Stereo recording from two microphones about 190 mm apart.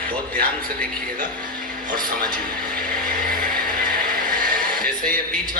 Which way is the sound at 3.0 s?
45° right (ahead or behind).